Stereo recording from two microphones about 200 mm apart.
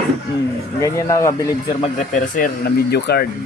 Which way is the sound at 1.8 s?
40° left (ahead or behind).